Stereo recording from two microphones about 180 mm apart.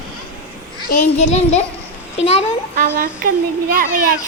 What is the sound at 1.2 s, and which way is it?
A child's voice, 35° left (ahead or behind).